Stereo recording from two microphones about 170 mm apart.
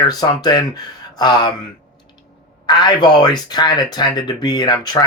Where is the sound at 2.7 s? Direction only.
25° left (ahead or behind).